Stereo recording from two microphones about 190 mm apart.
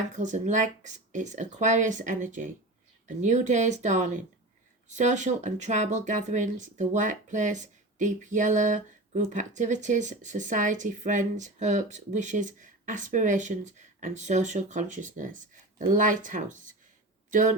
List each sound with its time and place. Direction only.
0.2 s speech: 40° right (ahead or behind)